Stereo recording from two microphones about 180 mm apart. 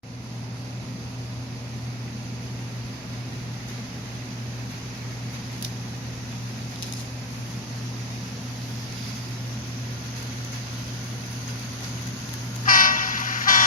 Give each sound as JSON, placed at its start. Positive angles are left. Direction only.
{"t": 12.6, "sound": "train", "side_deg": 50}